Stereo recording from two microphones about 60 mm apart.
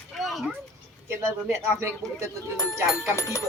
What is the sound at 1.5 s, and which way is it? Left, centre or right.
Speech, right.